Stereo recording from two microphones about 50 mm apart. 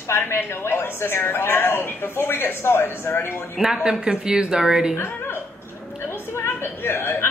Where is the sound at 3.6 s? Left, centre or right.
Centre.